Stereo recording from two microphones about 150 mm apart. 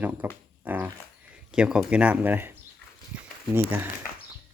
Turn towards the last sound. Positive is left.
turn(degrees=-15)  # may be behind; listen again after turning